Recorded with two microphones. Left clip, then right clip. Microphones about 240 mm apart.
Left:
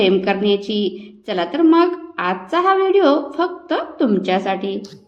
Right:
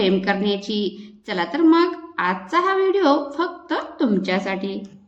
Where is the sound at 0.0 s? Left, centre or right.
Centre.